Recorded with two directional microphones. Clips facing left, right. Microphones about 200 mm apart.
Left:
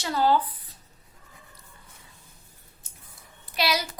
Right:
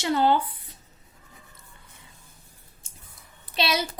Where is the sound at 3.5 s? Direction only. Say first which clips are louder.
Right 1 dB; 25° right (ahead or behind).